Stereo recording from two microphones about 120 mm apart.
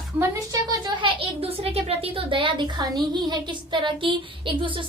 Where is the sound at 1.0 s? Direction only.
55° right (ahead or behind).